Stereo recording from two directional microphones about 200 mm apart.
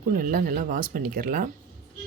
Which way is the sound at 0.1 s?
45° right (ahead or behind).